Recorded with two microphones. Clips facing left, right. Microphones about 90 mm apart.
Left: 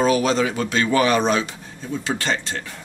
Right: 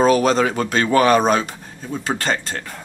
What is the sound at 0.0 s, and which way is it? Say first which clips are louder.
Speech: right 3 dB; 45° right (ahead or behind).